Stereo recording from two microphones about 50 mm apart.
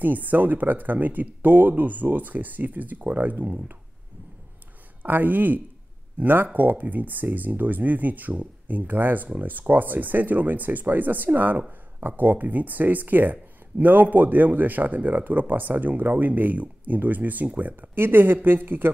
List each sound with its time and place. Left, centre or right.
0.0 s speech: right
5.0 s speech: right
17.9 s speech: right